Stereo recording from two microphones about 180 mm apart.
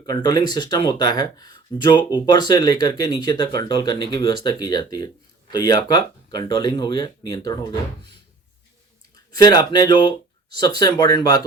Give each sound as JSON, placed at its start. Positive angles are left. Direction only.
{"t": 0.0, "sound": "speech", "side_deg": 20}
{"t": 9.3, "sound": "speech", "side_deg": 20}